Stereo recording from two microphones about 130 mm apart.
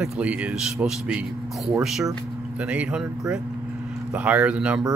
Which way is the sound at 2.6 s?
10° right (ahead or behind).